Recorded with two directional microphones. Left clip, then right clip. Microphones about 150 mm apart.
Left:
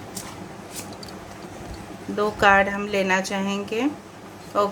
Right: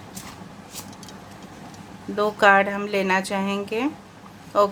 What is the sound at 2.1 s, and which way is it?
Speech, 30° right (ahead or behind).